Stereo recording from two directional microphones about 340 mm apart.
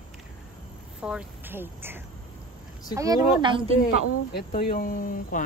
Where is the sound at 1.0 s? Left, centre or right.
Centre.